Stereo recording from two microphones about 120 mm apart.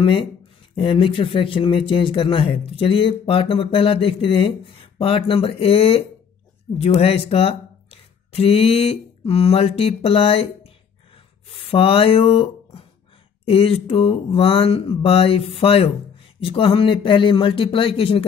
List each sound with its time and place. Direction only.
0.0 s speech: 50° left (ahead or behind)